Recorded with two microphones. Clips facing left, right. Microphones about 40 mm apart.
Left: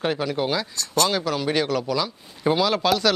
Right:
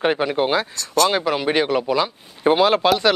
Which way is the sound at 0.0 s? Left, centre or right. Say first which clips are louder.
Right 5 dB; right.